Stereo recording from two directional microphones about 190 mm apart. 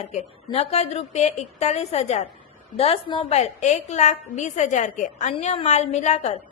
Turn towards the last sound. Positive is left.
turn(degrees=35)  # may be behind; listen again after turning